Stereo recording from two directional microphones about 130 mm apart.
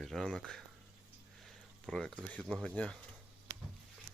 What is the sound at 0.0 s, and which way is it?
Speech, 5° left (ahead or behind).